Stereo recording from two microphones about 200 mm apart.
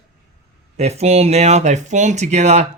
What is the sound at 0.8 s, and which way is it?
Speech, 30° right (ahead or behind).